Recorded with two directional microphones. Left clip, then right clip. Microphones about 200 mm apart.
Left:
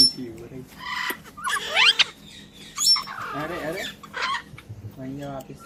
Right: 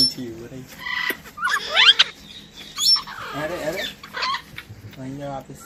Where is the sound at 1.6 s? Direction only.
25° left (ahead or behind).